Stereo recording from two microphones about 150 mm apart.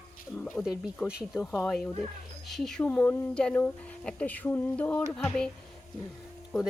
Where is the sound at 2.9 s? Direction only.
15° left (ahead or behind).